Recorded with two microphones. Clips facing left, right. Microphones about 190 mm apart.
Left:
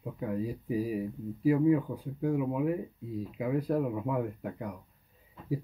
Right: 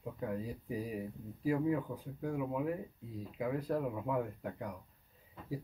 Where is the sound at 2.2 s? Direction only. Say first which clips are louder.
Left 7 dB; 10° left (ahead or behind).